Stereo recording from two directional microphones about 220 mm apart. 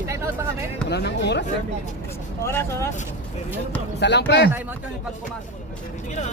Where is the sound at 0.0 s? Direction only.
15° right (ahead or behind).